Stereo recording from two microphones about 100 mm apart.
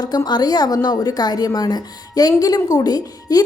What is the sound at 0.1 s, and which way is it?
A woman's voice, 45° left (ahead or behind).